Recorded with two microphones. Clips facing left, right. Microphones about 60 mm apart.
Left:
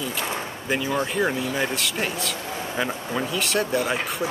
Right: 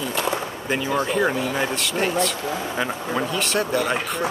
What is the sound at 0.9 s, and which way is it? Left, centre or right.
Speech, centre.